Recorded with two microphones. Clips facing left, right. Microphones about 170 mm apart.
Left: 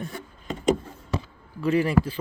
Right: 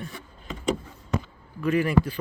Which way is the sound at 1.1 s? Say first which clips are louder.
Right 1 dB; 30° left (ahead or behind).